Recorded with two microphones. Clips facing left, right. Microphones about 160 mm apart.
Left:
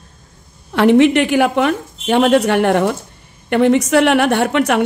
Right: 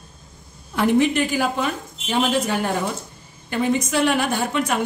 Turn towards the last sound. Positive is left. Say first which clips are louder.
# left 8 dB
turn(degrees=70)  # may be behind; listen again after turning